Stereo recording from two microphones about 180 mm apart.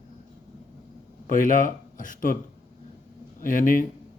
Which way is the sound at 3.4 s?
50° left (ahead or behind).